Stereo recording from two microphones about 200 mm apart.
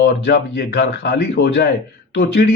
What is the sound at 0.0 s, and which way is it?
Speech, 60° left (ahead or behind).